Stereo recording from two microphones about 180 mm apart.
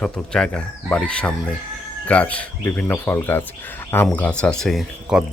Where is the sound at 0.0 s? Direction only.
5° left (ahead or behind).